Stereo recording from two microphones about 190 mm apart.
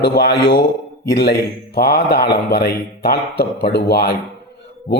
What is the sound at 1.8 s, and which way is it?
Speech, 60° left (ahead or behind).